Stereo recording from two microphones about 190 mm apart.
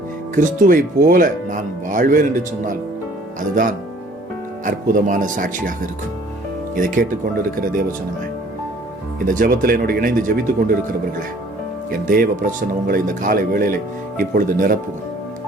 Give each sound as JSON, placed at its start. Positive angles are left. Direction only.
{"t": 0.3, "sound": "speech", "side_deg": -45}
{"t": 9.1, "sound": "speech", "side_deg": -45}
{"t": 11.9, "sound": "speech", "side_deg": -50}